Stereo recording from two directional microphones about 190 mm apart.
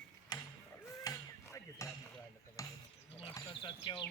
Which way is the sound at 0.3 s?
20° left (ahead or behind).